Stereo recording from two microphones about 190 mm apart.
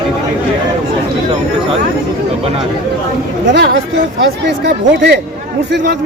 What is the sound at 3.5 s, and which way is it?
A man's voice, 65° right (ahead or behind).